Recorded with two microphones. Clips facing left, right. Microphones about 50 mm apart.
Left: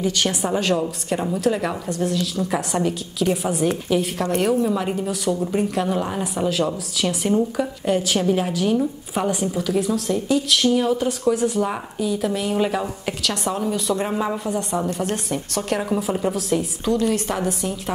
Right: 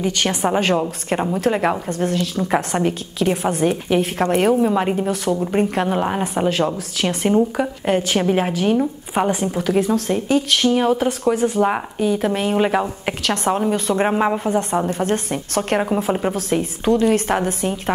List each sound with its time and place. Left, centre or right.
0.0 s speech: right
12.0 s a woman's voice: right
12.3 s speech: right